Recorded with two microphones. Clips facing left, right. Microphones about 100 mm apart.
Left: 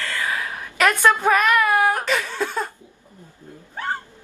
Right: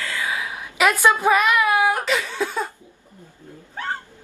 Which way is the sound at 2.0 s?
5° right (ahead or behind).